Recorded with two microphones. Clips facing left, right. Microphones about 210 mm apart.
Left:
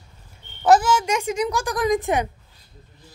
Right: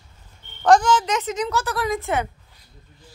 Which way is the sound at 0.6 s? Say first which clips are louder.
Even; 5° left (ahead or behind).